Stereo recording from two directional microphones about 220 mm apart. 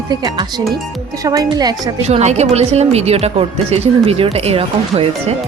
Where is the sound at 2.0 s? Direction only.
30° right (ahead or behind).